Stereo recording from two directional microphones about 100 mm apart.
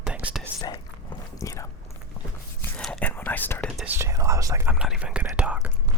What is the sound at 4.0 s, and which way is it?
Whispering, 30° right (ahead or behind).